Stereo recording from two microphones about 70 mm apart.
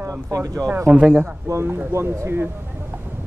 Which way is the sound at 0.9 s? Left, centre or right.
Centre.